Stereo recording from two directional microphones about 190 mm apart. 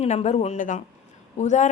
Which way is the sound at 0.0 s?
35° left (ahead or behind).